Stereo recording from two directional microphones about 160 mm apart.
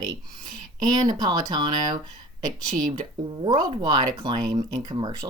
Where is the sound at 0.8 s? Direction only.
25° right (ahead or behind).